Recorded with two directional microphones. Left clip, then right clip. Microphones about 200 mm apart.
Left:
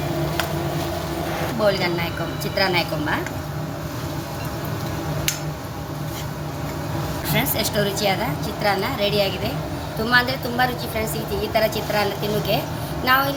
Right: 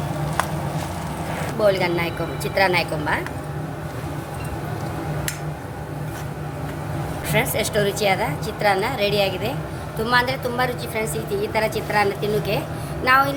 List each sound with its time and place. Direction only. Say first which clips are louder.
1.6 s a woman's voice: right 2 dB; 45° right (ahead or behind)
7.3 s a woman's voice: right 2 dB; 50° right (ahead or behind)